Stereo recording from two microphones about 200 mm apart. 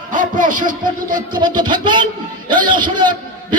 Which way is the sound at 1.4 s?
20° right (ahead or behind).